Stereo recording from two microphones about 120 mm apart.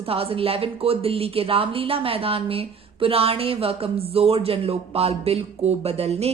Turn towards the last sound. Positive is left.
turn(degrees=-60)  # may be behind; listen again after turning